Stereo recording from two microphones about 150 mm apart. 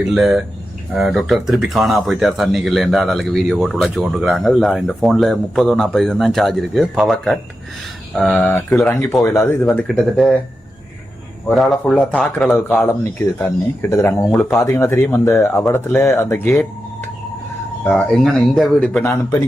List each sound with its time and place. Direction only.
0.0 s speech: 5° right (ahead or behind); by 9.6 s 20° left (ahead or behind)
9.6 s speech: 5° left (ahead or behind)
11.4 s speech: centre (ahead or behind)
12.5 s speech: 15° left (ahead or behind)
14.6 s speech: 15° left (ahead or behind)
17.8 s speech: 5° left (ahead or behind)
19.0 s speech: 20° left (ahead or behind)